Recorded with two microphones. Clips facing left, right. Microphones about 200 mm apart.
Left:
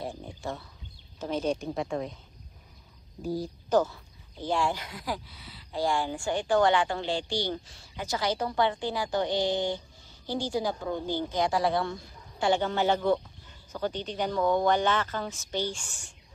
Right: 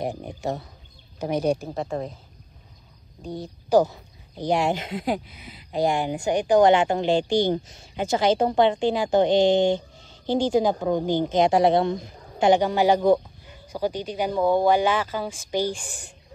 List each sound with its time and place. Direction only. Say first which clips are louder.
1.3 s speech: right 6 dB; 10° right (ahead or behind)
1.9 s speech: right 3 dB; 40° right (ahead or behind)
3.7 s speech: right 6 dB; 10° right (ahead or behind)